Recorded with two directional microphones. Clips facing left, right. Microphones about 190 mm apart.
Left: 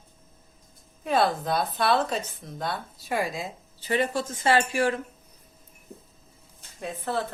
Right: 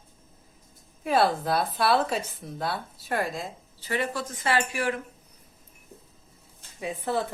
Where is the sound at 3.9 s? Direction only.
25° left (ahead or behind).